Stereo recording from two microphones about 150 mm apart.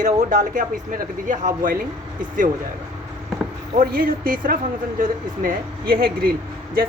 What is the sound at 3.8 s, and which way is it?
Speech, 75° right (ahead or behind).